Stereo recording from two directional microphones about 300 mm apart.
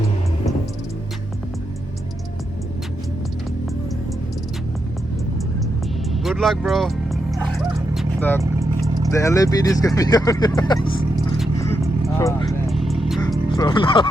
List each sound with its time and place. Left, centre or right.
6.2 s music: centre
9.0 s speech: centre
12.2 s speech: centre
12.6 s vehicle: centre
13.6 s speech: centre